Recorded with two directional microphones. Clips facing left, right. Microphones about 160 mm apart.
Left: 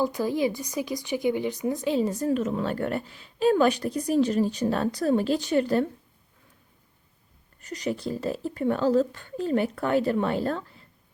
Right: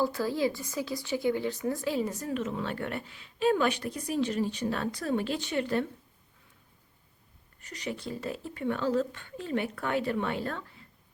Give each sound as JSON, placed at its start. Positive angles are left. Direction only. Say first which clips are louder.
{"t": 0.0, "sound": "speech", "louder": "left 3 dB", "side_deg": 15}
{"t": 7.6, "sound": "speech", "louder": "left 7 dB", "side_deg": 40}